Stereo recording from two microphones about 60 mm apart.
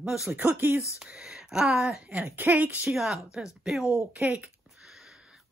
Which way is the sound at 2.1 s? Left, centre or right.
Right.